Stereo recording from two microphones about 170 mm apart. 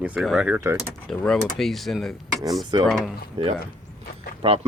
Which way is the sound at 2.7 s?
25° right (ahead or behind).